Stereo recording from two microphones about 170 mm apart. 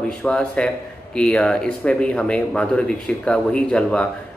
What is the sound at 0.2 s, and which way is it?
A man's voice, 5° left (ahead or behind).